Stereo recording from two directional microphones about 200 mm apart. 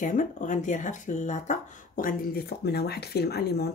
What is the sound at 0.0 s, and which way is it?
Speech, 40° left (ahead or behind).